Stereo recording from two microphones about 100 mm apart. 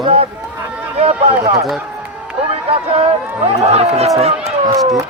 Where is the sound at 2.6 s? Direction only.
70° right (ahead or behind); by 4.5 s 90° right.